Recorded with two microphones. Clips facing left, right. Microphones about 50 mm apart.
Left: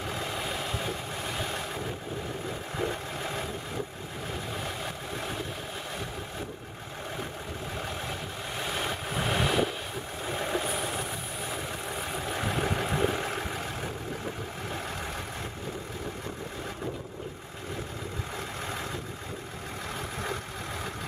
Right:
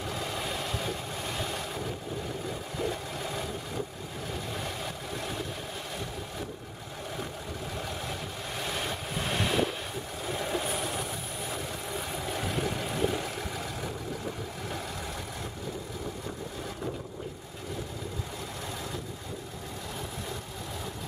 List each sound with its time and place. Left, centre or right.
0.1 s vehicle: centre
3.2 s vehicle: centre
8.5 s vehicle: centre
10.3 s vehicle: centre
10.6 s vehicle: centre
11.9 s vehicle: left